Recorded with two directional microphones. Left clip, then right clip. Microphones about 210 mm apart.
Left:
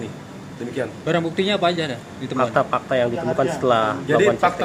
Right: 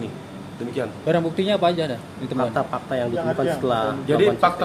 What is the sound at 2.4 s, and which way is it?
Speech, 25° left (ahead or behind).